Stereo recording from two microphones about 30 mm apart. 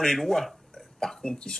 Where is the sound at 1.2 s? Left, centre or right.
Left.